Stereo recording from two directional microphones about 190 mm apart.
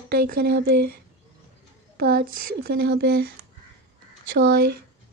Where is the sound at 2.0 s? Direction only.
55° right (ahead or behind).